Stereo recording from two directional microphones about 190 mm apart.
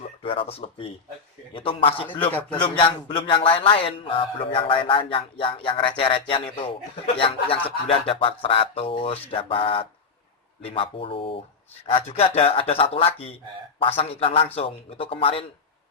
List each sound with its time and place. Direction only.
0.0 s a man's voice: 30° left (ahead or behind)